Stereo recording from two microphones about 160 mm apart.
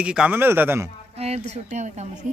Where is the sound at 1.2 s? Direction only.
40° right (ahead or behind).